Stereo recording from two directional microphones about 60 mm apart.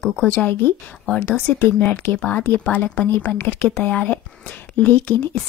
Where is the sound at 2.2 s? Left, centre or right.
Left.